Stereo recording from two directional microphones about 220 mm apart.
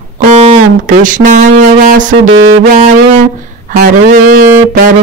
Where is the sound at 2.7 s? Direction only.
30° right (ahead or behind).